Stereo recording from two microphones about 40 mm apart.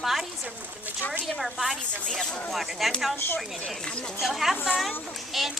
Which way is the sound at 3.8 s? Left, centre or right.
Centre.